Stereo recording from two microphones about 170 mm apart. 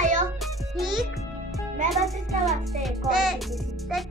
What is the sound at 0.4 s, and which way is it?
Music, centre (ahead or behind).